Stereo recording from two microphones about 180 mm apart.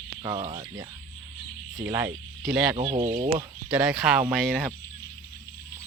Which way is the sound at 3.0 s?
35° right (ahead or behind).